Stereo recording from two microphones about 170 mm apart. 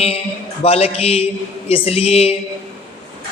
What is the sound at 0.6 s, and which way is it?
A man's voice, 35° left (ahead or behind).